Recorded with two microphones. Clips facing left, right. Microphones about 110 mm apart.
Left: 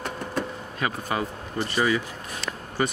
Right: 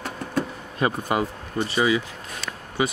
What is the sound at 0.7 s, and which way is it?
Speech, 30° right (ahead or behind).